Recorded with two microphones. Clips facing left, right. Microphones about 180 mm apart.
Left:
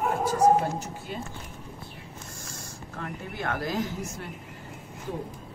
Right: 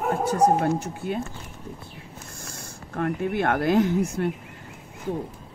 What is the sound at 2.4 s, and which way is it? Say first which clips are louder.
Speech: right 1 dB; 60° right (ahead or behind).